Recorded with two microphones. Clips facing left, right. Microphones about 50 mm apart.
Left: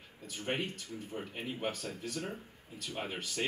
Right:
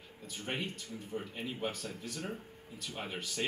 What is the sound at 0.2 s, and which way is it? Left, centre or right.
Speech, left.